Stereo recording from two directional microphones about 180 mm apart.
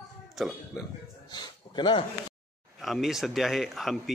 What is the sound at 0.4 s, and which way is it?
Speech, centre (ahead or behind).